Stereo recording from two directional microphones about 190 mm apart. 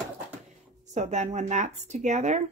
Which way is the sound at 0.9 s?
40° right (ahead or behind).